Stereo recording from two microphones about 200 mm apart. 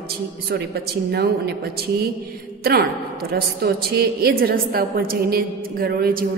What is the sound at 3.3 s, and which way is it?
A woman's voice, 50° right (ahead or behind).